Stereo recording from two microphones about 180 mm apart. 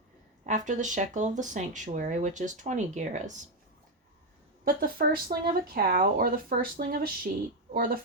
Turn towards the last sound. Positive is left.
turn(degrees=-55)  # may be behind; listen again after turning